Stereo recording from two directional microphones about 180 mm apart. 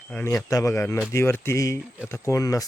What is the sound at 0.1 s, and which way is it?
Speech, 5° left (ahead or behind).